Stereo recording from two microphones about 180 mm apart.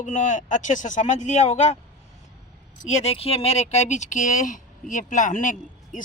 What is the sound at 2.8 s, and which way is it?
Speech, 40° left (ahead or behind).